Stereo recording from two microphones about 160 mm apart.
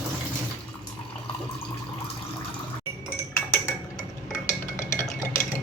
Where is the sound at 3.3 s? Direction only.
20° left (ahead or behind).